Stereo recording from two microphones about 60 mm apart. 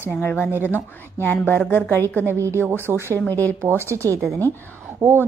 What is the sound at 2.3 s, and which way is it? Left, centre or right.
Speech, right.